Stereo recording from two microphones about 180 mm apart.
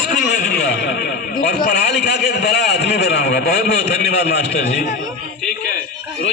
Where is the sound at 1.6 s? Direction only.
65° left (ahead or behind).